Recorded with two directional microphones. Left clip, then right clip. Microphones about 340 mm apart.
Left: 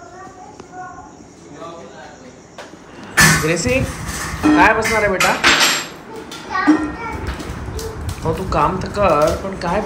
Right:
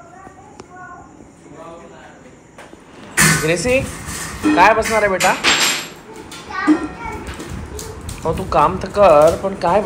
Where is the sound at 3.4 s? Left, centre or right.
Centre.